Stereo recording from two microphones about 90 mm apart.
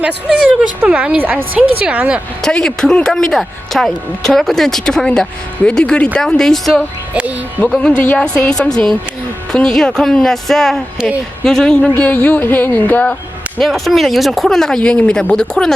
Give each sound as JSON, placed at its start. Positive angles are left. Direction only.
{"t": 0.0, "sound": "speech", "side_deg": -10}
{"t": 2.4, "sound": "speech", "side_deg": 5}
{"t": 7.1, "sound": "a sound", "side_deg": -15}
{"t": 7.9, "sound": "speech", "side_deg": 15}
{"t": 13.6, "sound": "speech", "side_deg": 0}